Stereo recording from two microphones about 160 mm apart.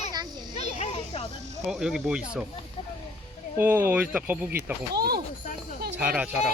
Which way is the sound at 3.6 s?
15° right (ahead or behind).